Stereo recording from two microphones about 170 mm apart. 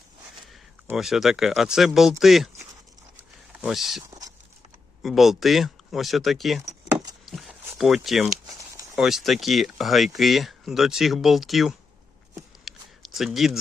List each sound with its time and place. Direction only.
0.9 s speech: centre (ahead or behind)
3.6 s speech: centre (ahead or behind)
5.0 s speech: centre (ahead or behind)
6.7 s keys jangling: 20° right (ahead or behind)
7.3 s a sound: centre (ahead or behind)
7.8 s speech: centre (ahead or behind)
12.6 s a sound: centre (ahead or behind)